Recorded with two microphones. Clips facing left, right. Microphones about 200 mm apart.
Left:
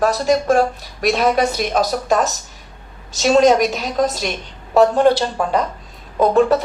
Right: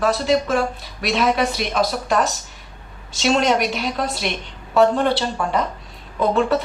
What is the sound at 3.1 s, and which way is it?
Speech, 40° left (ahead or behind).